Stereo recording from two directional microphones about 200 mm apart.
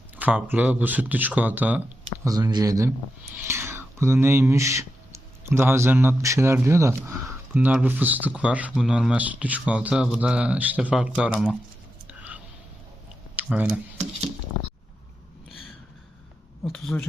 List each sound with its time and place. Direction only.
0.2 s speech: 10° right (ahead or behind)
12.0 s whispering: 5° right (ahead or behind)
13.3 s a sound: 10° right (ahead or behind)
13.7 s a sound: 35° right (ahead or behind)
15.4 s gasp: centre (ahead or behind)
16.6 s speech: 5° left (ahead or behind)